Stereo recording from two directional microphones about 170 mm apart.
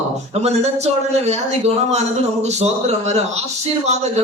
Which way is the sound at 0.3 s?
40° right (ahead or behind).